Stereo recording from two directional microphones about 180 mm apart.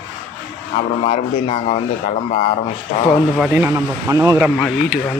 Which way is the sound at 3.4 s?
10° right (ahead or behind).